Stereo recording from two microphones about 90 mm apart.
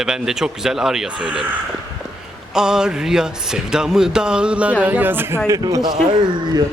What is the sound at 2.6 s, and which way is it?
Speech, 5° right (ahead or behind).